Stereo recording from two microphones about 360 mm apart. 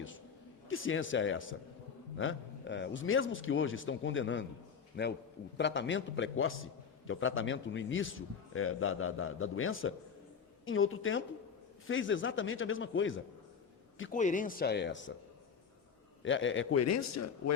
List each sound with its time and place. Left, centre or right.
0.7 s a man's voice: left
14.1 s speech: left
16.2 s a man's voice: left